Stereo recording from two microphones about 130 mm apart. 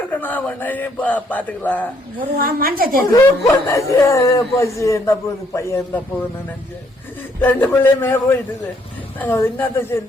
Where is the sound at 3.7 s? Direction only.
25° left (ahead or behind).